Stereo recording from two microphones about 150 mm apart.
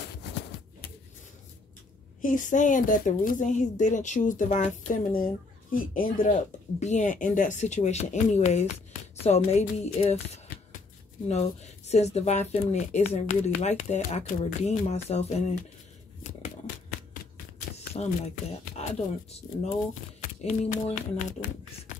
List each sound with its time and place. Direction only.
2.2 s speech: 60° left (ahead or behind)
6.8 s speech: 55° left (ahead or behind)
17.7 s shuffling cards: 45° left (ahead or behind)
18.8 s speech: 45° left (ahead or behind)
20.2 s a sound: 55° left (ahead or behind)